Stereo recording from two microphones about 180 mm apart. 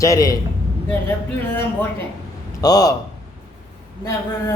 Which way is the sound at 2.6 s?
20° left (ahead or behind).